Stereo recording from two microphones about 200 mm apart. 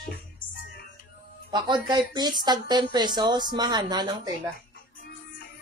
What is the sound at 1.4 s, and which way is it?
Speech, 20° right (ahead or behind).